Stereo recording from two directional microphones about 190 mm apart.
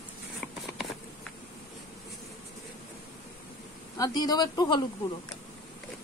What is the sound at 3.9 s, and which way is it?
Speech, 20° left (ahead or behind).